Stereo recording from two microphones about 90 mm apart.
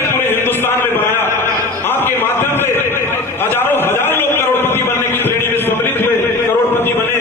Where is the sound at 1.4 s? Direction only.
25° left (ahead or behind).